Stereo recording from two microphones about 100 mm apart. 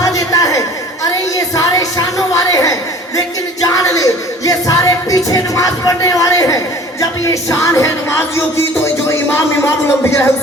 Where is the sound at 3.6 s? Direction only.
35° left (ahead or behind).